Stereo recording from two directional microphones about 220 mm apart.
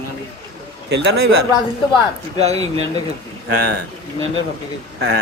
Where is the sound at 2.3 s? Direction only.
30° right (ahead or behind).